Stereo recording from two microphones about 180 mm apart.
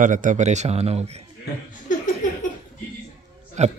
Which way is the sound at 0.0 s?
45° right (ahead or behind).